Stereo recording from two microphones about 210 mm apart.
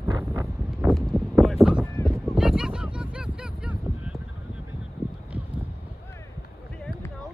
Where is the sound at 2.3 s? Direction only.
5° right (ahead or behind).